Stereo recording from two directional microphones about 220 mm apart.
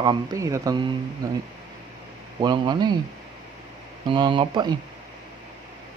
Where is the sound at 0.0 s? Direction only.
20° right (ahead or behind).